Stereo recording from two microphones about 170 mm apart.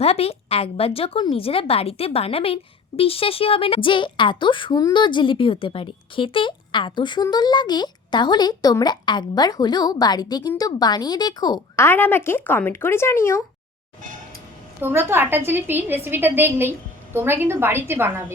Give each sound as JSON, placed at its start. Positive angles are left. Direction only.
{"t": 0.0, "sound": "speech", "side_deg": 35}
{"t": 11.9, "sound": "speech", "side_deg": 10}
{"t": 14.8, "sound": "a woman's voice", "side_deg": -15}